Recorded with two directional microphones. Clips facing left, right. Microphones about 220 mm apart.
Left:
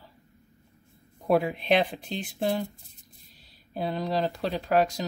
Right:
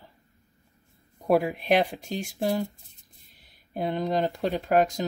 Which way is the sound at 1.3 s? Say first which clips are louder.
Right 1 dB; centre (ahead or behind).